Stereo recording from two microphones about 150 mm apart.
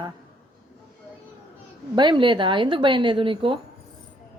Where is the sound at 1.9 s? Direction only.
30° right (ahead or behind).